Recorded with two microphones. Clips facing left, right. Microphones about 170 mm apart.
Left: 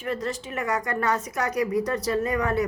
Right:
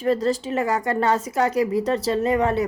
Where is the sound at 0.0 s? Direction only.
35° right (ahead or behind).